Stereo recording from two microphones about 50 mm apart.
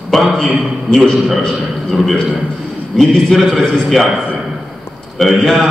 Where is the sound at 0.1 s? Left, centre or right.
Centre.